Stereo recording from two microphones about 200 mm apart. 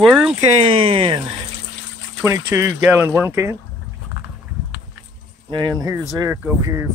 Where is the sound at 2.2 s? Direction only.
15° right (ahead or behind).